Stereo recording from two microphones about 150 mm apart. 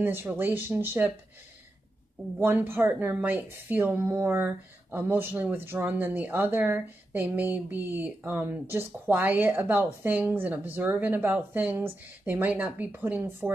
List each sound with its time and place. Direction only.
0.0 s a woman's voice: 15° right (ahead or behind)
2.3 s a woman's voice: 15° right (ahead or behind)